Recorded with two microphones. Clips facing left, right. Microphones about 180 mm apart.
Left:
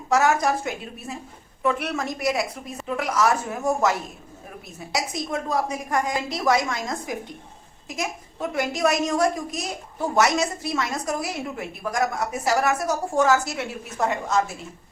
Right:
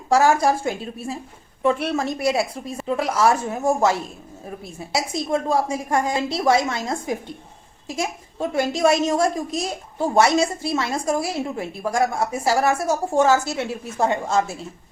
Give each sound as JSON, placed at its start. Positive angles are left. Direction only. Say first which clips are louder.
{"t": 0.1, "sound": "a woman's voice", "louder": "right 3 dB", "side_deg": -30}